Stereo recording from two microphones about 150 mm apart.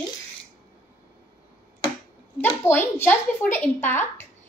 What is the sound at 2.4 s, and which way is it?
A woman's voice, 15° left (ahead or behind).